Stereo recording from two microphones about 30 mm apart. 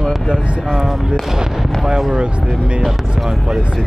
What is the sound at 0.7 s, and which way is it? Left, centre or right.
Speech, centre.